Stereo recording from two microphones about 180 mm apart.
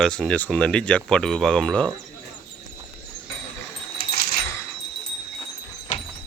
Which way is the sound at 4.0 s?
60° left (ahead or behind).